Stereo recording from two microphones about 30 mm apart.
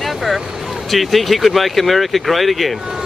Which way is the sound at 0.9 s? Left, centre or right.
Centre.